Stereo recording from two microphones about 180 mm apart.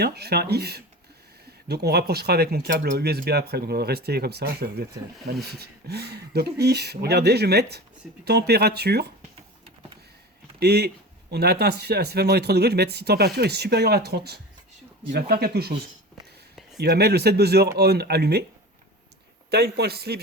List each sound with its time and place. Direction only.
0.0 s speech: 60° right (ahead or behind)
10.6 s speech: 65° right (ahead or behind)
16.7 s speech: 65° right (ahead or behind)
19.5 s speech: 65° right (ahead or behind)